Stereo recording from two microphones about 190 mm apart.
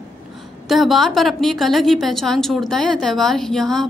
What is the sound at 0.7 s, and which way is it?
A woman's voice, centre (ahead or behind).